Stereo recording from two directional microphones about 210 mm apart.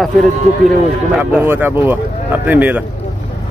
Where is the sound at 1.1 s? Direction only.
5° right (ahead or behind).